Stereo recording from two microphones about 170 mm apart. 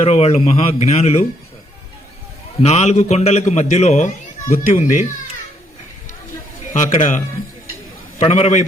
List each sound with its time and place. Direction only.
0.0 s speech: 40° left (ahead or behind)
2.6 s speech: 40° left (ahead or behind)
6.7 s speech: 45° left (ahead or behind)
8.2 s speech: 40° left (ahead or behind)